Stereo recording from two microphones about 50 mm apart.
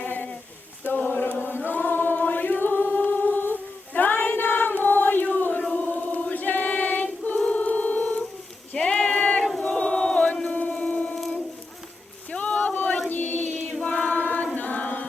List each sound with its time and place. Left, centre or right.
0.0 s a sound: left
0.9 s chant: left
1.7 s singing: left
5.7 s choir: left
8.7 s a sound: centre
9.6 s chant: left
12.3 s boat: left
12.7 s choir: left
13.1 s child singing: left
13.8 s choir: left